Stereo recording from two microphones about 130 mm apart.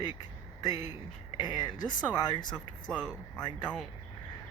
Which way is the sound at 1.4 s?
35° left (ahead or behind).